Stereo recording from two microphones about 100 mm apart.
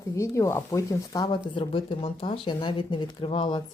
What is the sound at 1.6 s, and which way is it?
Speech, 65° left (ahead or behind).